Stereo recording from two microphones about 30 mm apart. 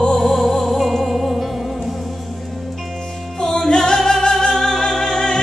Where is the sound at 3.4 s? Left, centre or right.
Centre.